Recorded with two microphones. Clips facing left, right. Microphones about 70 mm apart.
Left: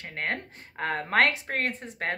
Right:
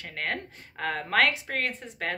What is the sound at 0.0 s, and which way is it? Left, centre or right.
A woman's voice, left.